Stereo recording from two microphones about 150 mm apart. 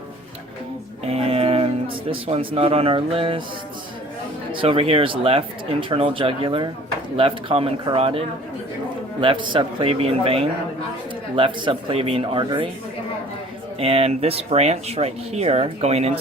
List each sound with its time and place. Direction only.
1.0 s music: 40° right (ahead or behind)
4.5 s speech: 35° right (ahead or behind)
9.2 s speech: 35° right (ahead or behind)
13.7 s speech: 40° right (ahead or behind)